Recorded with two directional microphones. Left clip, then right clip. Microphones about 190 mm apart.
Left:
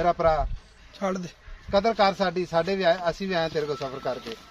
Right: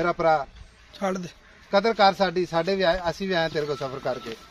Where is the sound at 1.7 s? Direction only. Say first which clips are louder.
Right 2 dB; 50° right (ahead or behind).